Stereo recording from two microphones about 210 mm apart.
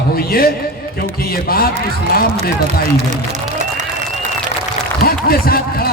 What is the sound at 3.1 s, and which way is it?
Applause, 35° right (ahead or behind).